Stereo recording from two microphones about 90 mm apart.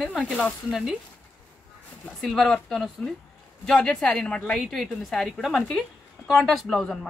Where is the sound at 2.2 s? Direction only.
5° left (ahead or behind).